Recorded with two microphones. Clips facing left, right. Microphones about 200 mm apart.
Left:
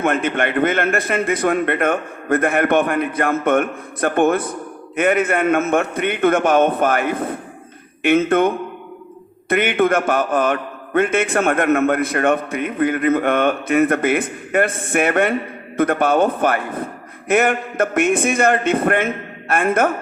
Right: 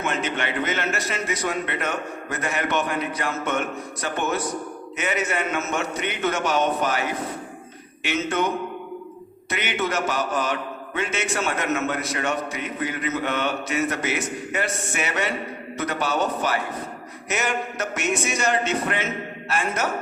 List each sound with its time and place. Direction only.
0.0 s a man's voice: 55° left (ahead or behind)